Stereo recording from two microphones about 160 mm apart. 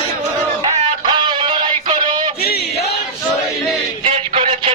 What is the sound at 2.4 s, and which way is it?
Choir, 80° left.